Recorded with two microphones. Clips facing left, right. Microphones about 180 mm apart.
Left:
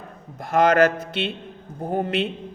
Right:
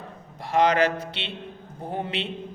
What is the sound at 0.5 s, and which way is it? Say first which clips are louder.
A man's voice: left 4 dB; 50° left (ahead or behind).